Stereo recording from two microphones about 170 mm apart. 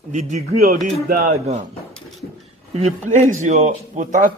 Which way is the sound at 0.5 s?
60° right (ahead or behind).